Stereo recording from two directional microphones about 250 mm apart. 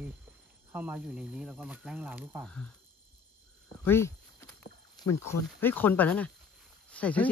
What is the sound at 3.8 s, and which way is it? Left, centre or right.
Speech, centre.